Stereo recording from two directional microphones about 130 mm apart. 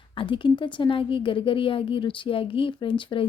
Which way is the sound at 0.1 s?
40° left (ahead or behind).